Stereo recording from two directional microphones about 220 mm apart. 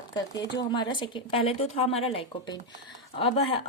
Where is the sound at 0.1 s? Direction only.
20° left (ahead or behind).